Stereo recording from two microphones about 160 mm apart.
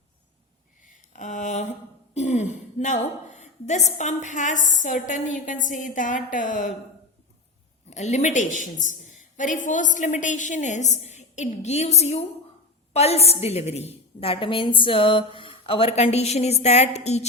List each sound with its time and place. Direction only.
1.1 s a sound: 50° left (ahead or behind)
2.1 s a woman's voice: 50° left (ahead or behind)
7.9 s a woman's voice: 45° left (ahead or behind)